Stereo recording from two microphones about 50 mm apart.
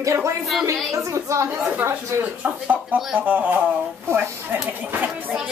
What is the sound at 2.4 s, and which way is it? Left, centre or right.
Speech, right.